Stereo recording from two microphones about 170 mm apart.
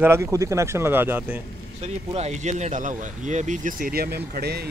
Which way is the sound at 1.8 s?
40° right (ahead or behind).